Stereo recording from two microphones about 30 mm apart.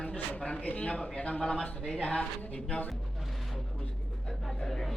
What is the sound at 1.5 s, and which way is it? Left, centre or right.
Speech, left.